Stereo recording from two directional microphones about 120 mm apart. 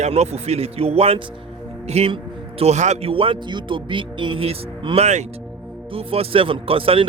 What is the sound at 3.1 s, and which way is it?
Speech, 50° right (ahead or behind).